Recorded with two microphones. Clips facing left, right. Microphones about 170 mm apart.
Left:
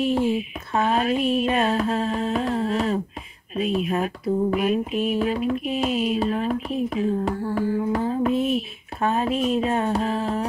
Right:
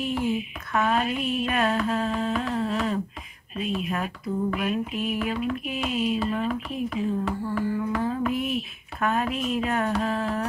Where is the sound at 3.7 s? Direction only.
25° left (ahead or behind).